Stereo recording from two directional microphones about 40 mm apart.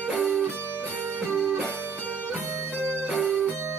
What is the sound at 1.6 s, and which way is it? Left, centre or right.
Music, right.